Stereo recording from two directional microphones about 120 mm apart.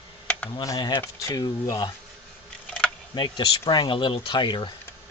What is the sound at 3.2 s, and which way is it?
Speech, 40° left (ahead or behind).